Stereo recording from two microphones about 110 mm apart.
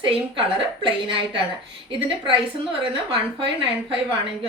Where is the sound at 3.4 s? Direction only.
50° right (ahead or behind).